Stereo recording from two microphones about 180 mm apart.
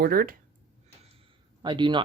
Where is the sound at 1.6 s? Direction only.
25° right (ahead or behind).